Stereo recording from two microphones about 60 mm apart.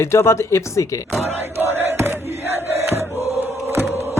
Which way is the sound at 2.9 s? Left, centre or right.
Right.